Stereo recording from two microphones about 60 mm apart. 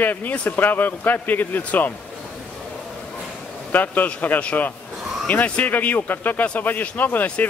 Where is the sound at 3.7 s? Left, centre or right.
Left.